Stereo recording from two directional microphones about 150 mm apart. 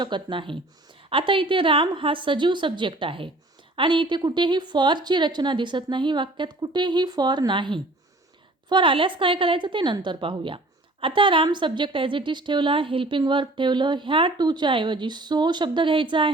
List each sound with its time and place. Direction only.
0.0 s a woman's voice: 30° right (ahead or behind)